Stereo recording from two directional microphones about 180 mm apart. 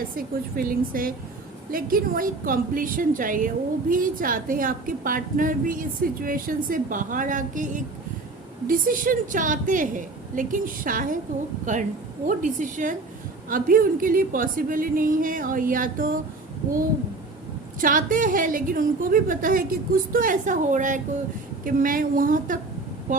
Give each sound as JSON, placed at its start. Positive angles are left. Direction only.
{"t": 0.2, "sound": "a woman's voice", "side_deg": -55}
{"t": 17.7, "sound": "a woman's voice", "side_deg": -50}